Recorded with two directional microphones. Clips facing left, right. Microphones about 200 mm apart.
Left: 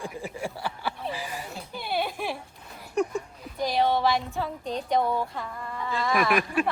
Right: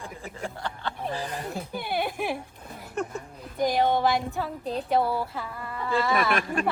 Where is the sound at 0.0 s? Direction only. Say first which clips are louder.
Left 3 dB; 10° left (ahead or behind).